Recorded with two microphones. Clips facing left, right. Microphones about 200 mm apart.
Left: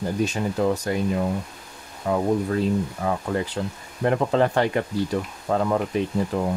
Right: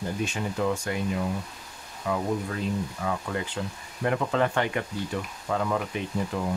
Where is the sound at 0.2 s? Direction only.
35° left (ahead or behind).